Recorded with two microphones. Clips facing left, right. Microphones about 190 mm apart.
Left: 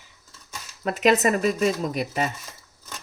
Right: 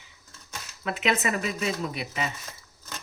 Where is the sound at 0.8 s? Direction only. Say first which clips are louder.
Left 7 dB; 40° left (ahead or behind).